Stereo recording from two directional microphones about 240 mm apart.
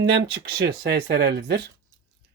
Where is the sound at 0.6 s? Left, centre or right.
Right.